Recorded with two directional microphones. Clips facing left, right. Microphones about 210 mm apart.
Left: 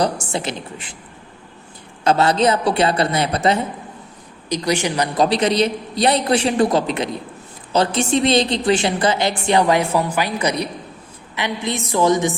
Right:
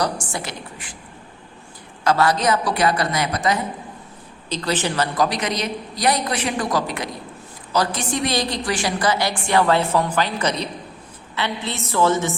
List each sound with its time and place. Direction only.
0.0 s a woman's voice: 25° left (ahead or behind)
2.0 s a woman's voice: 25° left (ahead or behind)
4.4 s a woman's voice: 15° left (ahead or behind)